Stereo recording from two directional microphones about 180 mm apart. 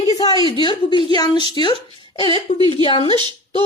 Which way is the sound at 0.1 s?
20° left (ahead or behind).